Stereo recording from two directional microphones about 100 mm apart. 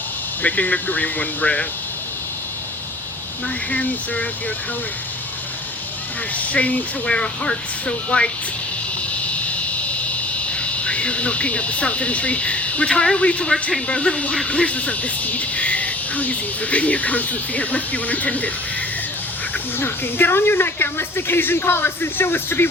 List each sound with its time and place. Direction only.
0.4 s speech: 15° left (ahead or behind)
3.7 s speech: 15° left (ahead or behind)
6.3 s speech: 15° left (ahead or behind)
10.5 s speech: 10° left (ahead or behind)
19.8 s a woman's voice: 20° left (ahead or behind)